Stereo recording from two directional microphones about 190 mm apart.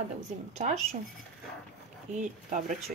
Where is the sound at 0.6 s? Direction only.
35° right (ahead or behind).